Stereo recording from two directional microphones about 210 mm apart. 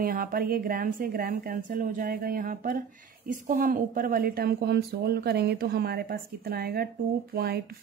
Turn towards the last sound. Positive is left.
turn(degrees=-50)  # may be behind; listen again after turning